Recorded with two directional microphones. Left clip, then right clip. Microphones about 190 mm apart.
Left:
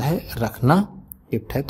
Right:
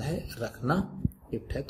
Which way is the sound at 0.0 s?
45° left (ahead or behind).